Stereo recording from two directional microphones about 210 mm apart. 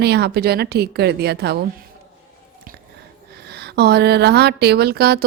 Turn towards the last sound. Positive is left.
turn(degrees=-50)  # may be behind; listen again after turning